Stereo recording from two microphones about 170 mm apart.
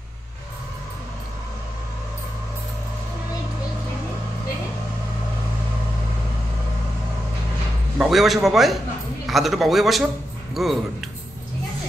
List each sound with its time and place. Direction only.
8.0 s a man's voice: centre (ahead or behind)